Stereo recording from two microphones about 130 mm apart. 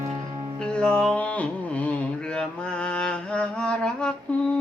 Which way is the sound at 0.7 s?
5° left (ahead or behind).